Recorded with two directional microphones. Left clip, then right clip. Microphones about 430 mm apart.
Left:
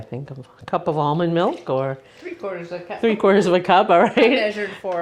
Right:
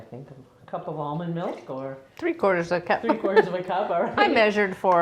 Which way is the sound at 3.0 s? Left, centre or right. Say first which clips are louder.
Left 8 dB; left.